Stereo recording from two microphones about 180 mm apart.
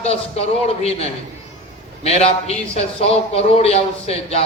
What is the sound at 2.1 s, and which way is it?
A man's voice, 35° left (ahead or behind).